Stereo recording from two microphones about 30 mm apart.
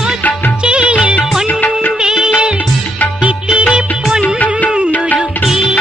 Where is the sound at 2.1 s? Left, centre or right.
Centre.